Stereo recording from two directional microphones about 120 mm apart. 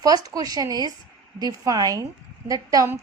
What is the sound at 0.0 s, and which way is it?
A woman's voice, 30° right (ahead or behind).